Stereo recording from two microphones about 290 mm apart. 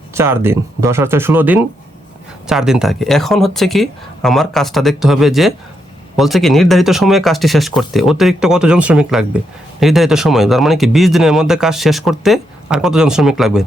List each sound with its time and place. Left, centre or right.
0.1 s speech: centre